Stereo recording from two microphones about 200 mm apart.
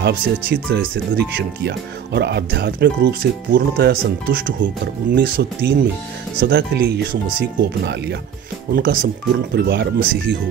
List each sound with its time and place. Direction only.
0.0 s speech: 55° right (ahead or behind)
8.7 s speech: 45° right (ahead or behind)